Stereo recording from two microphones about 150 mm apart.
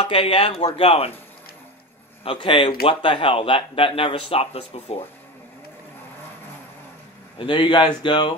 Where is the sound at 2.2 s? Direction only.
35° left (ahead or behind).